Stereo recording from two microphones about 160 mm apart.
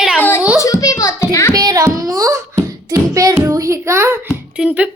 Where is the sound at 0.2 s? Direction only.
10° left (ahead or behind).